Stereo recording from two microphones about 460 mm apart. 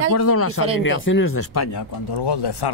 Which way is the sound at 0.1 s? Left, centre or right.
Left.